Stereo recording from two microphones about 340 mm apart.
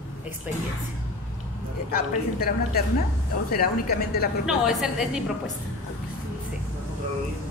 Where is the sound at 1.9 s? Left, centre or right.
Left.